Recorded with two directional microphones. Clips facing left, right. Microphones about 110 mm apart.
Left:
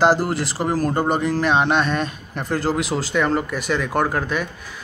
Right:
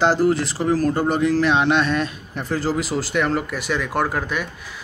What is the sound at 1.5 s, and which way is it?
Speech, 45° left (ahead or behind).